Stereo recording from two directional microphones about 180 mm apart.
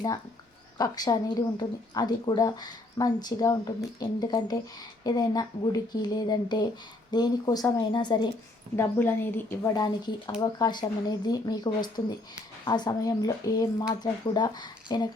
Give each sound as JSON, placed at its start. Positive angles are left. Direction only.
{"t": 0.8, "sound": "speech", "side_deg": 20}
{"t": 8.7, "sound": "speech", "side_deg": 15}